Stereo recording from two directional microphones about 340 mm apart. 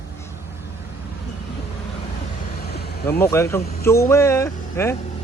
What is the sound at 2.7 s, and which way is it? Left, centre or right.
Vehicle, left.